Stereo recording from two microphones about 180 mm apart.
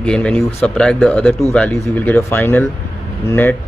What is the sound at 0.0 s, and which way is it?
Speech, 5° left (ahead or behind).